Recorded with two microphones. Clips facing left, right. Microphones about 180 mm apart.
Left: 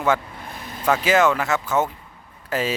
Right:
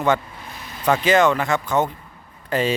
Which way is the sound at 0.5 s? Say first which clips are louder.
Left 3 dB; 50° left (ahead or behind).